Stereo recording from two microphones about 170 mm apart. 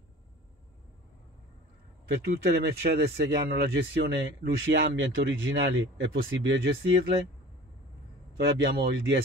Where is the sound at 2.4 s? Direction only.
70° right (ahead or behind).